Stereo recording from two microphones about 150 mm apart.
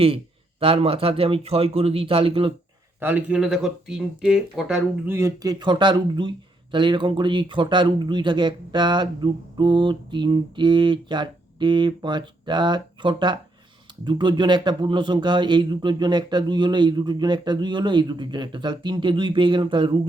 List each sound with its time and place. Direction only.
0.6 s speech: 40° right (ahead or behind)
3.0 s speech: 10° right (ahead or behind)
5.0 s speech: 20° right (ahead or behind); by 20.0 s 35° right (ahead or behind)